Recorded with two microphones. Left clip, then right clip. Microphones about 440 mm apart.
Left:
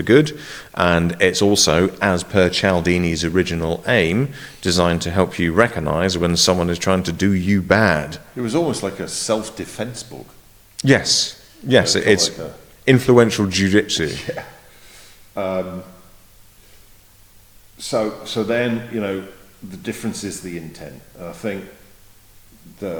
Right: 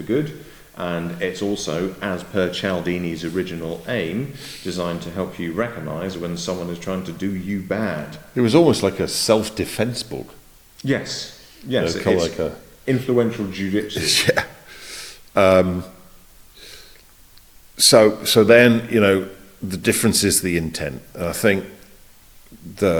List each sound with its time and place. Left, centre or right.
0.1 s speech: left
0.7 s speech: left
8.4 s speech: right
10.8 s speech: left
14.1 s speech: right
17.7 s speech: right